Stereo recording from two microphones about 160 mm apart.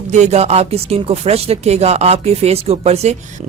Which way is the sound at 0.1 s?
45° right (ahead or behind).